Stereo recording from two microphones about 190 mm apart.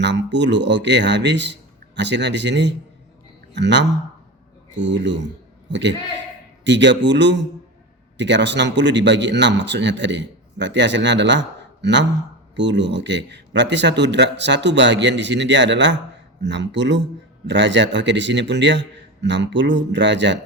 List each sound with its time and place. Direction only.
0.0 s a man's voice: 65° right (ahead or behind)
6.7 s a man's voice: 70° right (ahead or behind)